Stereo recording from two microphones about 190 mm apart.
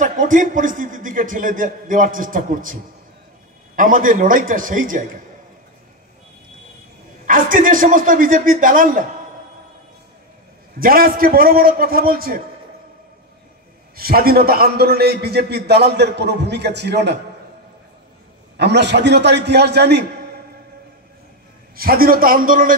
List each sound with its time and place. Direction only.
0.0 s a man's voice: 45° right (ahead or behind)
7.2 s a man's voice: 45° right (ahead or behind)
10.8 s a man's voice: 50° right (ahead or behind)
13.9 s a man's voice: 55° right (ahead or behind)
18.6 s a man's voice: 65° right (ahead or behind)
21.7 s a man's voice: 50° right (ahead or behind)